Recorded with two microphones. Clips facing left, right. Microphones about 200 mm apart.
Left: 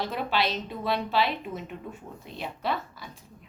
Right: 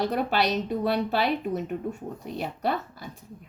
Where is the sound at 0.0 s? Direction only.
40° right (ahead or behind).